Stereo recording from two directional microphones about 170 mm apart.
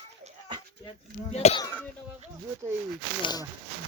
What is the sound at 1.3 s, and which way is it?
Speech, 40° left (ahead or behind).